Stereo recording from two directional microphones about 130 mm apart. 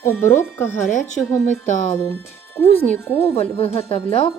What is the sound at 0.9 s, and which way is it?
Speech, 80° left.